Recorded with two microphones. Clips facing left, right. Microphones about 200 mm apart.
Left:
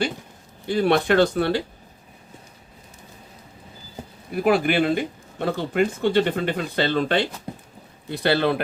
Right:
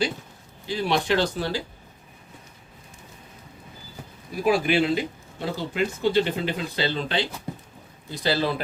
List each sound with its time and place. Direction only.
0.7 s a man's voice: 55° left (ahead or behind)
4.4 s a man's voice: 60° left (ahead or behind)